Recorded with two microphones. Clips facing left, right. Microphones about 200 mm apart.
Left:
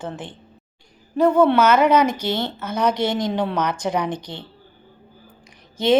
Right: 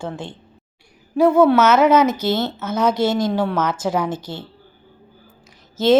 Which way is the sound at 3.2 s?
15° left (ahead or behind).